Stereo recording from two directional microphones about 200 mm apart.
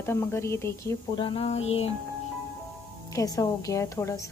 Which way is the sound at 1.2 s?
25° left (ahead or behind).